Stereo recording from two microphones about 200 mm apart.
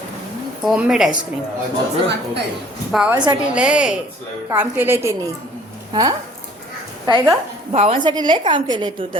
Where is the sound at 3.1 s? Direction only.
20° right (ahead or behind).